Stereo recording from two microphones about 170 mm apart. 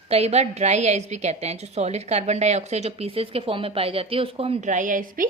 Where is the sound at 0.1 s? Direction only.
40° right (ahead or behind).